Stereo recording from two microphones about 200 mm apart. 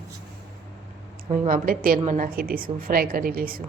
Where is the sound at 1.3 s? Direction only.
45° right (ahead or behind).